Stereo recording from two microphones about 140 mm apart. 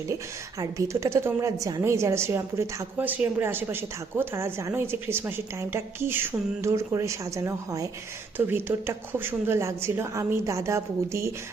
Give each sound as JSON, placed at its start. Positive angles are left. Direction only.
{"t": 0.6, "sound": "a woman's voice", "side_deg": -20}